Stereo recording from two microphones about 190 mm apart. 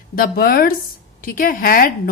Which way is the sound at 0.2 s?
50° left (ahead or behind).